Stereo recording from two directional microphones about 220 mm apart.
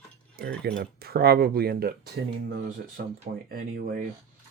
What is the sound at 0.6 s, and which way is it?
Speech, 50° right (ahead or behind).